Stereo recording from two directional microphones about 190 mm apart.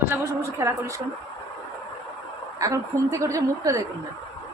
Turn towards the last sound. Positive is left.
turn(degrees=-15)  # may be behind; listen again after turning